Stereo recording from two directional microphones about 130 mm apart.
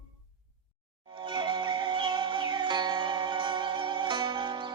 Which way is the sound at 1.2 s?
40° right (ahead or behind).